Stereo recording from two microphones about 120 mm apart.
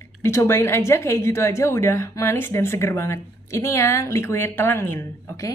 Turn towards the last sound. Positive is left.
turn(degrees=25)  # may be behind; listen again after turning